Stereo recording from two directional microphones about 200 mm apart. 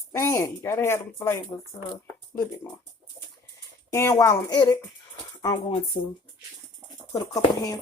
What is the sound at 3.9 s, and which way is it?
Speech, 15° left (ahead or behind).